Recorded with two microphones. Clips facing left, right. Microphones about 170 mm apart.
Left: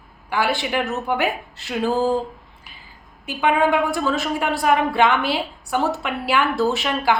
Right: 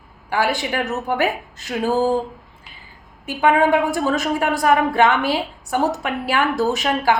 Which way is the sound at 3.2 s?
45° right (ahead or behind).